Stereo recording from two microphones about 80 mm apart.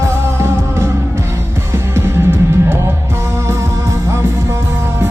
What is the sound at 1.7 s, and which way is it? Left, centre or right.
Music, right.